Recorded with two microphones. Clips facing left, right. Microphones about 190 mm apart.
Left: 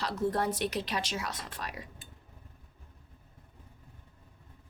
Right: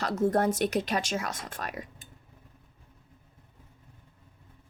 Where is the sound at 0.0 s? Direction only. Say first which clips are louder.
Right 5 dB; 45° right (ahead or behind).